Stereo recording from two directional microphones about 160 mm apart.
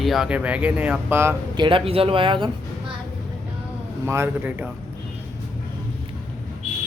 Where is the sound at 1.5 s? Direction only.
30° right (ahead or behind).